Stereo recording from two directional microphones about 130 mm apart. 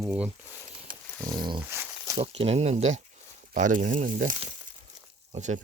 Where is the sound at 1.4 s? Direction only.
35° right (ahead or behind).